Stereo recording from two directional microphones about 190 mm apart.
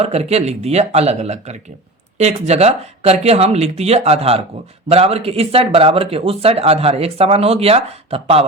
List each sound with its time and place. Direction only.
0.0 s speech: 35° right (ahead or behind)